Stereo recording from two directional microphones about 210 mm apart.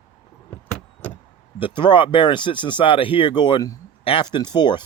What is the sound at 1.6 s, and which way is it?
Speech, 25° left (ahead or behind).